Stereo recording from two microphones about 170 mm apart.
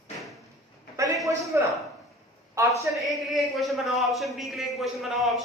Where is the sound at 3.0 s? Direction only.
Centre (ahead or behind).